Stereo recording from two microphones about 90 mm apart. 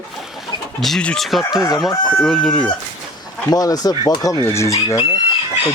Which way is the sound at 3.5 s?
45° left (ahead or behind).